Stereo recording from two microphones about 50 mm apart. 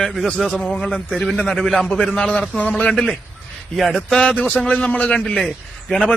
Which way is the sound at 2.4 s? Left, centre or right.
Left.